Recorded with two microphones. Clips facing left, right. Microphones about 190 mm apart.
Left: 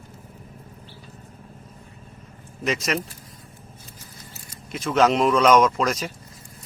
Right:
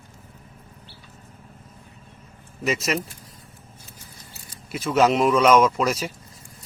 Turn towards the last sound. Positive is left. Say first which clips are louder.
# even
turn(degrees=-5)  # may be behind; listen again after turning